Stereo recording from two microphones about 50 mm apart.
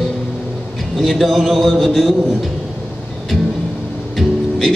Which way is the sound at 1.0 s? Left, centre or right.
Centre.